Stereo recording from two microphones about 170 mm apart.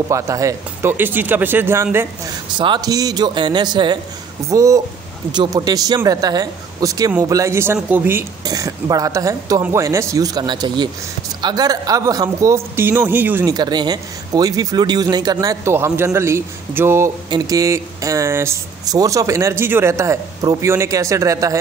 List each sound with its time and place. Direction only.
0.1 s speech: 20° right (ahead or behind)
2.5 s speech: 25° right (ahead or behind)
13.6 s speech: 25° right (ahead or behind)